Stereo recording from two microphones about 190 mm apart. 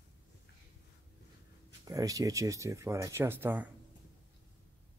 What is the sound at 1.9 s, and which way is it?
Speech, 15° right (ahead or behind).